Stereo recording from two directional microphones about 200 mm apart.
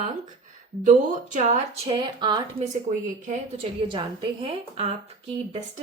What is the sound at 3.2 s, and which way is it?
A woman's voice, 40° right (ahead or behind).